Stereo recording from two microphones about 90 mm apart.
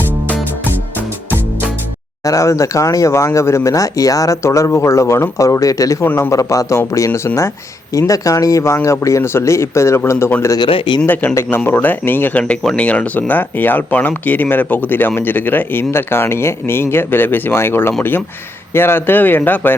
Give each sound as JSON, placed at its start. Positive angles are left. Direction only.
{"t": 2.2, "sound": "speech", "side_deg": 35}
{"t": 10.7, "sound": "speech", "side_deg": 75}
{"t": 11.0, "sound": "speech", "side_deg": 20}